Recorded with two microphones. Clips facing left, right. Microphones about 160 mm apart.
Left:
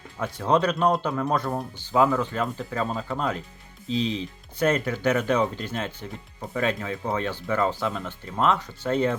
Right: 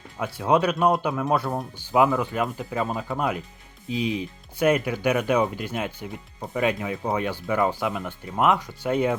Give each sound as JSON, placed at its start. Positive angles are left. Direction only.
{"t": 0.2, "sound": "speech", "side_deg": -10}